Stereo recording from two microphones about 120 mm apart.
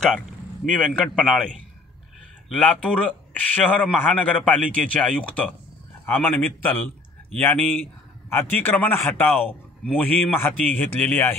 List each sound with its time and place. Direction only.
0.7 s a man's voice: 5° left (ahead or behind)
2.5 s a man's voice: 10° left (ahead or behind)